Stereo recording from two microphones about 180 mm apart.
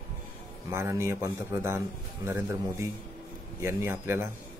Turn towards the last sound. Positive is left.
turn(degrees=-15)  # may be behind; listen again after turning